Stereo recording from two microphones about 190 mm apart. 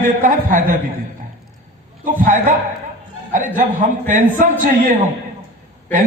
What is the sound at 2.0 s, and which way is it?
A woman's voice, 45° right (ahead or behind).